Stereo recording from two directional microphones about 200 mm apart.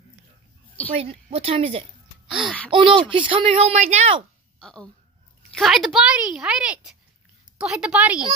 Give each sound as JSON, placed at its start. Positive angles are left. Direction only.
{"t": 0.9, "sound": "a woman's voice", "side_deg": -30}
{"t": 4.6, "sound": "a child's voice", "side_deg": 5}